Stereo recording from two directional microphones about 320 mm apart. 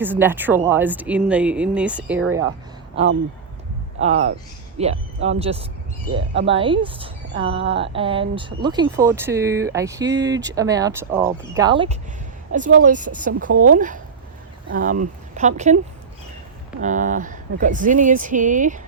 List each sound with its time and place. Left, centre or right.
0.0 s speech: centre
4.0 s a woman's voice: centre
13.5 s speech: right
13.7 s speech: right
16.8 s speech: right